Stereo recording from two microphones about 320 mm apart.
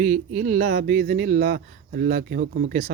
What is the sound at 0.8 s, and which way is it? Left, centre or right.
Speech, right.